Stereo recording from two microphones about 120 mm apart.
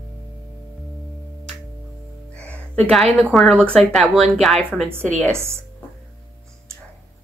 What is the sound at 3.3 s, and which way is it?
Speech, centre (ahead or behind).